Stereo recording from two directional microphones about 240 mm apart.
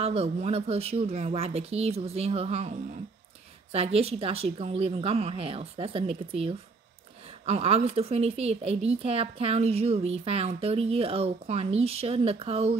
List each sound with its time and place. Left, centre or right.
0.0 s a woman's voice: right